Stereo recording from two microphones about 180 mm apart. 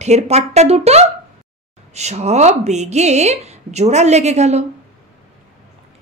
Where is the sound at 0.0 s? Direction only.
40° right (ahead or behind).